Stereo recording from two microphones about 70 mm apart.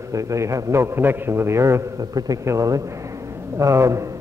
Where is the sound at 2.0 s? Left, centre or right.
Right.